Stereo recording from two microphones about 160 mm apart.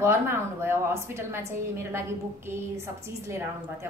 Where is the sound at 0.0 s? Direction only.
15° right (ahead or behind).